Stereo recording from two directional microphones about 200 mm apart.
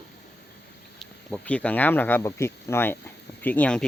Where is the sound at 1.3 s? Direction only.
5° left (ahead or behind).